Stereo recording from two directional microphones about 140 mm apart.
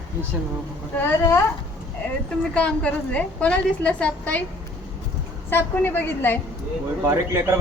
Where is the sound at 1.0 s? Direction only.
20° left (ahead or behind).